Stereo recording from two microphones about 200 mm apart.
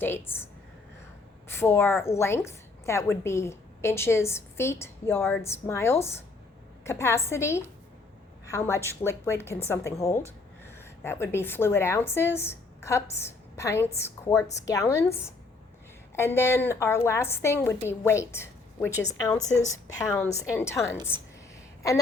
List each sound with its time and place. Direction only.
0.0 s a woman's voice: 10° left (ahead or behind)
1.5 s a woman's voice: 10° left (ahead or behind)